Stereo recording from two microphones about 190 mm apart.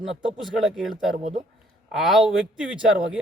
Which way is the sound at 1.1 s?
45° right (ahead or behind).